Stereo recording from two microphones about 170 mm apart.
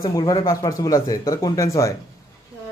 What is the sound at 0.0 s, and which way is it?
Speech, 25° left (ahead or behind).